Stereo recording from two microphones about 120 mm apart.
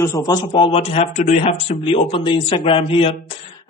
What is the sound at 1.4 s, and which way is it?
A man's voice, 50° left (ahead or behind).